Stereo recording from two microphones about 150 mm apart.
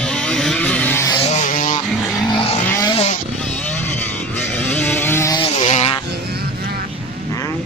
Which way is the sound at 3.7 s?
10° left (ahead or behind).